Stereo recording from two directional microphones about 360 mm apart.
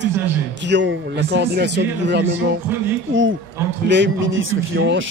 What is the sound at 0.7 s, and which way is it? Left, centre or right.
A man's voice, right.